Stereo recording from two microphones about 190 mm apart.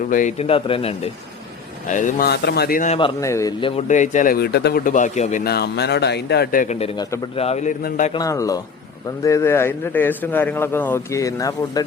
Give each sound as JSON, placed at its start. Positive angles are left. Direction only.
{"t": 0.1, "sound": "speech", "side_deg": 40}
{"t": 1.9, "sound": "speech", "side_deg": 40}
{"t": 3.0, "sound": "a man's voice", "side_deg": 15}
{"t": 3.6, "sound": "speech", "side_deg": 35}
{"t": 5.5, "sound": "speech", "side_deg": 60}
{"t": 6.7, "sound": "speech", "side_deg": 30}
{"t": 8.1, "sound": "a man's voice", "side_deg": 20}